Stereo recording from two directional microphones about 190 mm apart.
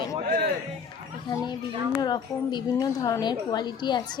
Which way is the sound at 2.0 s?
20° left (ahead or behind).